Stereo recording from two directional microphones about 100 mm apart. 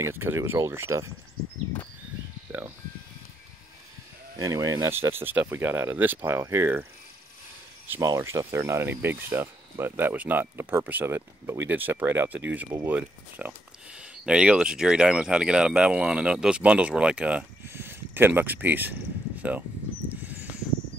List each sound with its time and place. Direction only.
0.0 s speech: 25° right (ahead or behind)
4.4 s speech: 35° right (ahead or behind)
5.1 s speech: 20° right (ahead or behind)
8.0 s speech: 30° right (ahead or behind); by 17.5 s 10° right (ahead or behind)
17.6 s a sound: 25° right (ahead or behind)